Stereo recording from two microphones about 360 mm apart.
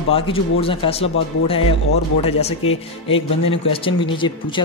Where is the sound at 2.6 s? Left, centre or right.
Left.